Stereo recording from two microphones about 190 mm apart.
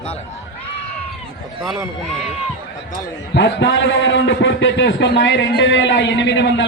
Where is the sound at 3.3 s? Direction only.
65° left (ahead or behind).